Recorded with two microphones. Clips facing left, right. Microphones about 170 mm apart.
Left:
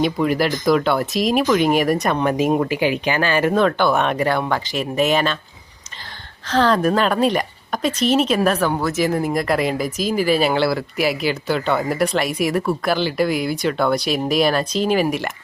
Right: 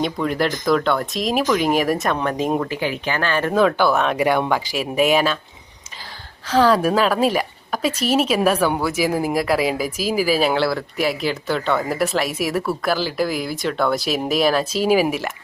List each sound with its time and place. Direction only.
0.0 s a woman's voice: 5° left (ahead or behind)
3.5 s a woman's voice: 5° right (ahead or behind)
4.2 s speech: 10° right (ahead or behind)
6.5 s a woman's voice: 10° right (ahead or behind)